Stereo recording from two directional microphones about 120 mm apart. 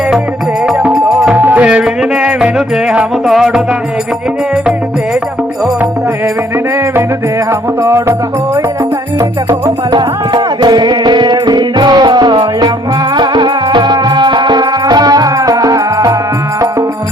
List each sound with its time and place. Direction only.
0.6 s music: 10° right (ahead or behind)
1.3 s music: 15° right (ahead or behind)
7.8 s music: 20° right (ahead or behind)
9.5 s music: 30° right (ahead or behind)